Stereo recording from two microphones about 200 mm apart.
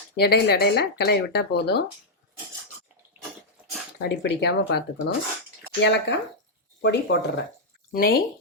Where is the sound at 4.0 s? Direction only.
55° left (ahead or behind).